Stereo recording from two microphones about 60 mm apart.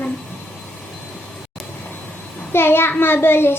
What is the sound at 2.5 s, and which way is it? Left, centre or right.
A child's voice, left.